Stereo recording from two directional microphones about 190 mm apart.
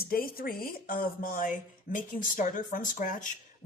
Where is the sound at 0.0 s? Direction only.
50° left (ahead or behind).